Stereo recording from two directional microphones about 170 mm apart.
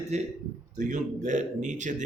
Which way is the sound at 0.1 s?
40° right (ahead or behind).